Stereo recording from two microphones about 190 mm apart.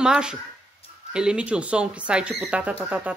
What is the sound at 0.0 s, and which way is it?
Speech, 5° right (ahead or behind).